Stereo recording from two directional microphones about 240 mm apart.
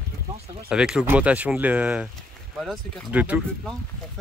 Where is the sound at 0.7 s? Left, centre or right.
Centre.